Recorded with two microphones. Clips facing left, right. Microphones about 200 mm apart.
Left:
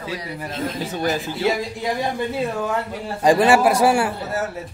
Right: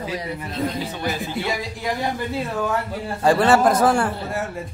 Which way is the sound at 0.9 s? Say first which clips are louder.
Left 4 dB; 45° left (ahead or behind).